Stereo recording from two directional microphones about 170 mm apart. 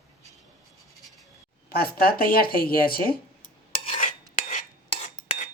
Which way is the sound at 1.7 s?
60° left (ahead or behind).